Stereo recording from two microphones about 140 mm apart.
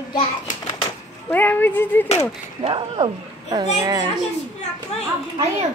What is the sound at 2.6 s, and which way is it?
A child's voice, 35° right (ahead or behind).